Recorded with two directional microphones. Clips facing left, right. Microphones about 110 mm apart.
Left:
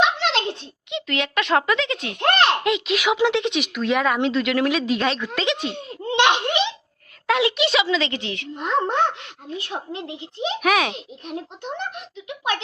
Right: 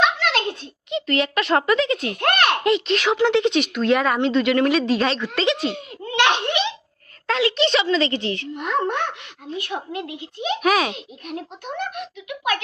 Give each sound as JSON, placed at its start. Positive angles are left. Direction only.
{"t": 0.0, "sound": "a sound", "side_deg": 25}
{"t": 0.9, "sound": "speech", "side_deg": 0}
{"t": 5.7, "sound": "baby laughter", "side_deg": 30}
{"t": 6.2, "sound": "a child's voice", "side_deg": 15}
{"t": 8.5, "sound": "a woman's voice", "side_deg": 25}
{"t": 10.6, "sound": "speech", "side_deg": 0}
{"t": 10.9, "sound": "a woman's voice", "side_deg": 25}